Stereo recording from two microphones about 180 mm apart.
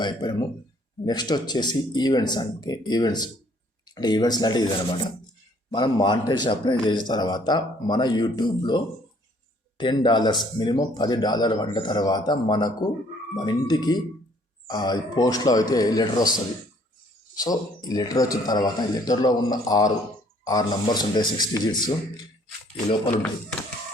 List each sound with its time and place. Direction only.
0.0 s speech: 25° left (ahead or behind)
17.3 s speech: 20° left (ahead or behind)